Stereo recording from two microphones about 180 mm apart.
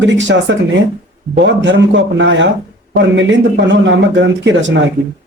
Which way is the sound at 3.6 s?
85° right.